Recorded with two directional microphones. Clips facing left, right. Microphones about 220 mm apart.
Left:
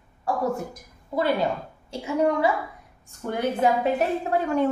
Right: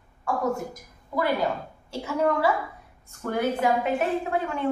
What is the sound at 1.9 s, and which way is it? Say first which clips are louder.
Speech: left 2 dB; 15° left (ahead or behind).